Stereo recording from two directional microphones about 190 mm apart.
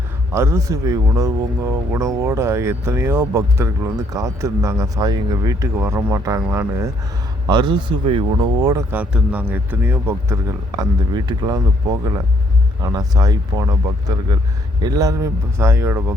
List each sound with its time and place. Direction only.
0.3 s speech: 15° right (ahead or behind)
12.8 s speech: 20° right (ahead or behind)
14.8 s speech: 20° right (ahead or behind)